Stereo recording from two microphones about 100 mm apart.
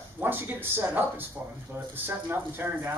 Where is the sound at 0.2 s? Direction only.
20° right (ahead or behind).